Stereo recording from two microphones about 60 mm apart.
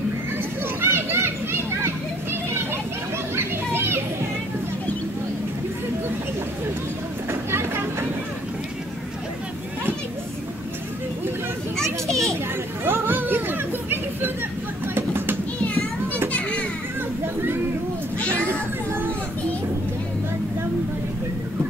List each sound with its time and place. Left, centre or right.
0.7 s children playing: right
3.3 s children playing: right
7.2 s vehicle: right
11.7 s children playing: centre
12.8 s chatter: right
15.0 s a sound: right
15.6 s children playing: left